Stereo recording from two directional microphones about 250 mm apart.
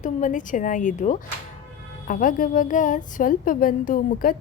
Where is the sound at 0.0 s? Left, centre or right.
Left.